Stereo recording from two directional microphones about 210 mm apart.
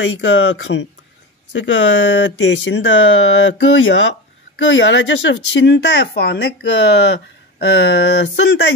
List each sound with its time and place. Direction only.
0.0 s speech: 60° left (ahead or behind)